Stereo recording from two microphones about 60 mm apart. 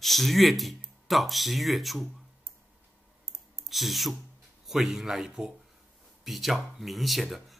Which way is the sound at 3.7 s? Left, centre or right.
Centre.